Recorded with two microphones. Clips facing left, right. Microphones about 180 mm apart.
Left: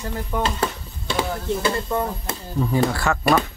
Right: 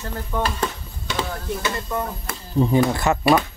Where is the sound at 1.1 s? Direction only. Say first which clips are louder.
Left 2 dB; 30° left (ahead or behind).